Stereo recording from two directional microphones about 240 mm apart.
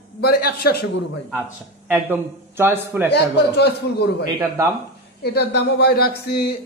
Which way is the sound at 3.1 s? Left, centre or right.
Left.